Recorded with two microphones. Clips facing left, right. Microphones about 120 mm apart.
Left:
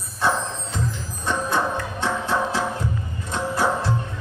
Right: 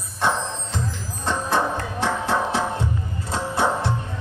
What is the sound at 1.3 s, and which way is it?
Music, 30° right (ahead or behind).